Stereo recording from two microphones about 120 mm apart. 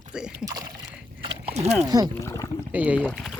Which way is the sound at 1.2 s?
60° right (ahead or behind).